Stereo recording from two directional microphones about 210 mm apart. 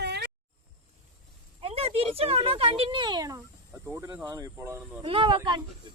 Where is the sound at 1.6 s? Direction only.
25° right (ahead or behind).